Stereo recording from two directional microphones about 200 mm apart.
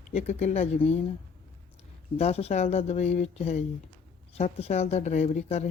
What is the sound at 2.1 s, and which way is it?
Speech, 30° left (ahead or behind).